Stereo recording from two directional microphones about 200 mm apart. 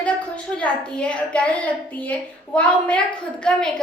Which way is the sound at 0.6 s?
5° left (ahead or behind).